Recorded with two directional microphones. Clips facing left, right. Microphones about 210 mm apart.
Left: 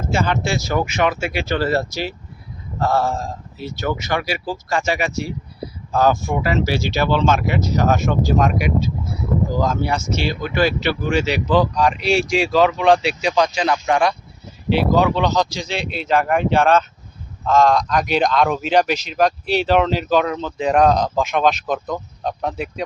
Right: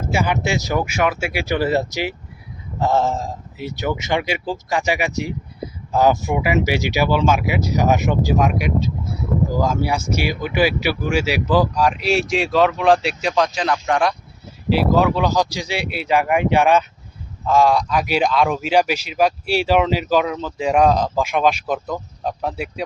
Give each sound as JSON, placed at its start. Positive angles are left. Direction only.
{"t": 0.1, "sound": "speech", "side_deg": -10}